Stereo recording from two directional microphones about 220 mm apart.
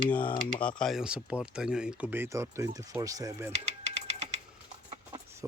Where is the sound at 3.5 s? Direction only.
30° right (ahead or behind).